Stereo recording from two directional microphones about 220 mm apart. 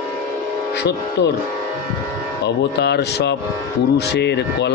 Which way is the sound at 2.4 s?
50° left (ahead or behind).